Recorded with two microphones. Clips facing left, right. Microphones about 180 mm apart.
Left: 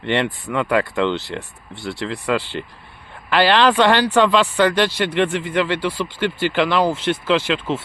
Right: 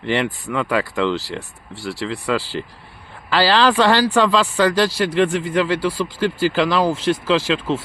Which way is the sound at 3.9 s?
35° right (ahead or behind).